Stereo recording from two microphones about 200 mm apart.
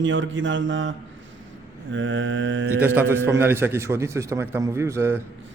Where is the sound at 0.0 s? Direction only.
70° right (ahead or behind).